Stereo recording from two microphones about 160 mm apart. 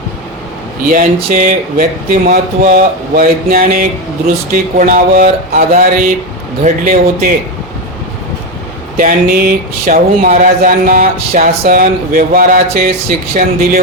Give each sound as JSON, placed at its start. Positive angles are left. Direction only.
{"t": 0.9, "sound": "speech", "side_deg": -60}
{"t": 9.0, "sound": "speech", "side_deg": -60}